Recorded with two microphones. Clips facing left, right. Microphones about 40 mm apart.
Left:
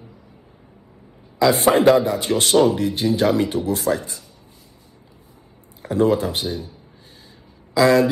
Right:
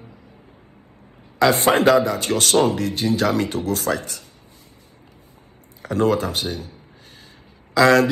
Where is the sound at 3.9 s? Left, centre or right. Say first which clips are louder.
Left 2 dB; right.